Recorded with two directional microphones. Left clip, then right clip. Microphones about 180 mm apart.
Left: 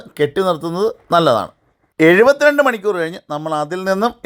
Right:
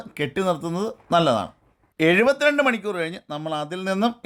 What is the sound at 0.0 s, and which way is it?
Speech, 20° left (ahead or behind).